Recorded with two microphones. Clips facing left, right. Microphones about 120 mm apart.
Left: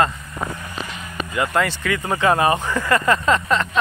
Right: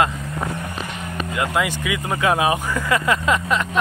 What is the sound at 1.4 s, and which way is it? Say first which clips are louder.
Speech: left 2 dB; 10° right (ahead or behind).